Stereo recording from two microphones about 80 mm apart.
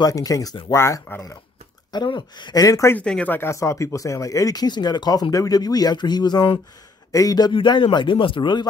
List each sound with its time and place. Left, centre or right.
0.0 s speech: left
0.7 s speech: left
1.9 s a man's voice: left
2.6 s speech: left
3.0 s speech: centre
3.3 s speech: left
7.1 s a man's voice: left